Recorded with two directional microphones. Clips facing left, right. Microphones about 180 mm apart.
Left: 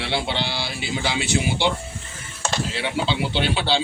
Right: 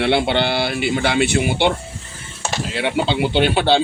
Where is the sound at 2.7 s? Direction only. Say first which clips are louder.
Right 5 dB; 55° right (ahead or behind).